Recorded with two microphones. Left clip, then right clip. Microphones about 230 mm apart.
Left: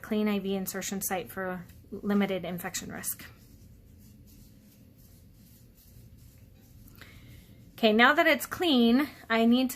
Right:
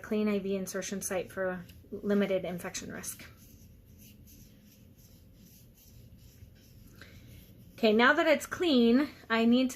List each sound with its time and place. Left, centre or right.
0.0 s a woman's voice: left
7.8 s a woman's voice: left